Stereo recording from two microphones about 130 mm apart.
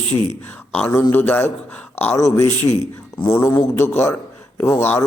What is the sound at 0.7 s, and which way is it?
A man's voice, 15° left (ahead or behind).